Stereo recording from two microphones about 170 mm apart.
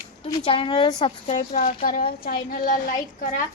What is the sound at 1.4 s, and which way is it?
A woman's voice, 50° left (ahead or behind).